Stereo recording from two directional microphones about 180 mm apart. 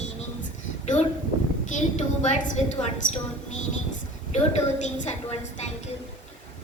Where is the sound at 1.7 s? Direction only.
40° left (ahead or behind).